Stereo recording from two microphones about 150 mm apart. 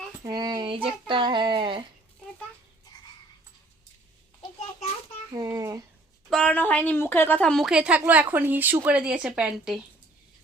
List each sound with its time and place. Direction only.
0.3 s a sound: 25° right (ahead or behind)
5.4 s a child's voice: 20° right (ahead or behind)
6.3 s speech: 10° left (ahead or behind)